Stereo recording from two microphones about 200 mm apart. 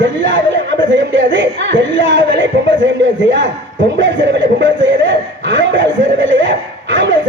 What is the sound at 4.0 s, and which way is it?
Chuckle, 65° right (ahead or behind).